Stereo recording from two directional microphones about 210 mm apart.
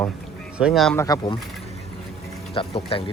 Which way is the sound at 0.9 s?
15° left (ahead or behind).